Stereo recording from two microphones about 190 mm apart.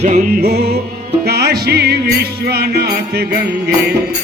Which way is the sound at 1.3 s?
60° right (ahead or behind).